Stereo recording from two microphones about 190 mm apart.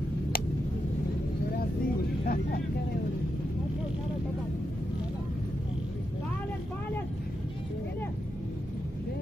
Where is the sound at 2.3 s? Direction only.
50° left (ahead or behind).